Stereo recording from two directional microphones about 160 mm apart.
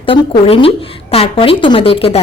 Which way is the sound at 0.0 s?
35° left (ahead or behind).